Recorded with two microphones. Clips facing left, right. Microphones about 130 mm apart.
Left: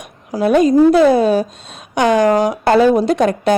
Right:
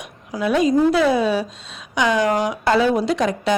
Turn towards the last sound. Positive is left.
turn(degrees=55)  # may be behind; listen again after turning